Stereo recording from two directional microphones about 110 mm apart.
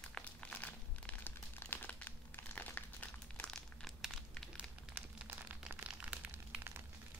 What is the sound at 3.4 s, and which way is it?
Crumpling, 5° left (ahead or behind).